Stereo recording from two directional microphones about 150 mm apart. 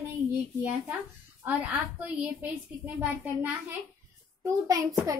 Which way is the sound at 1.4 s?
10° right (ahead or behind).